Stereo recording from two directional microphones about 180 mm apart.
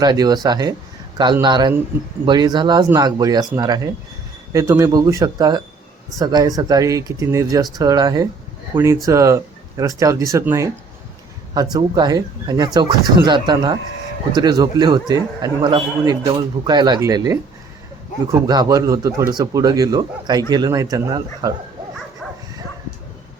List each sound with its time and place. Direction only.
0.0 s a man's voice: 20° right (ahead or behind)